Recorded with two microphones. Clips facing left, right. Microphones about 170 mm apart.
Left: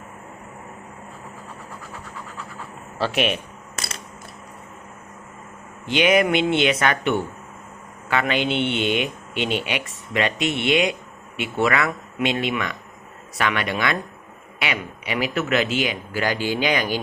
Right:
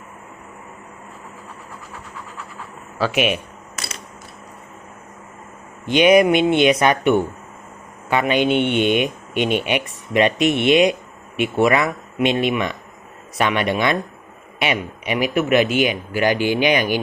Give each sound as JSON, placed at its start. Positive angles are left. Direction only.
{"t": 3.2, "sound": "speech", "side_deg": -5}
{"t": 5.9, "sound": "speech", "side_deg": -20}